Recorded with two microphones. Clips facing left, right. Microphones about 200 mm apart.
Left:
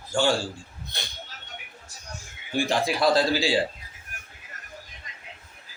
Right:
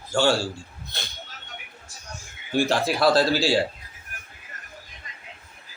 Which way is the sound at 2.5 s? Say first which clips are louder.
Right 2 dB; 15° left (ahead or behind).